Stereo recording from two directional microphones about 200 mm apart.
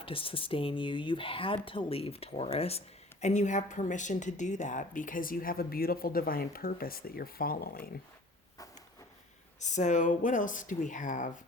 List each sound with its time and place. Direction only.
0.0 s speech: 25° left (ahead or behind); by 7.9 s 50° left (ahead or behind)
9.6 s speech: 35° left (ahead or behind)